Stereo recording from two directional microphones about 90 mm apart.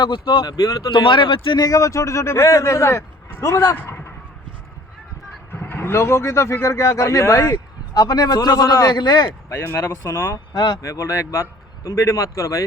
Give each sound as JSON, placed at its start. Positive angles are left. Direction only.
{"t": 0.0, "sound": "speech", "side_deg": 65}
{"t": 0.4, "sound": "speech", "side_deg": 45}
{"t": 0.9, "sound": "speech", "side_deg": 65}
{"t": 1.6, "sound": "speech", "side_deg": 35}
{"t": 3.8, "sound": "speech", "side_deg": 25}
{"t": 5.5, "sound": "speech", "side_deg": 25}
{"t": 9.8, "sound": "speech", "side_deg": 40}
{"t": 10.3, "sound": "speech", "side_deg": 55}
{"t": 10.8, "sound": "speech", "side_deg": 35}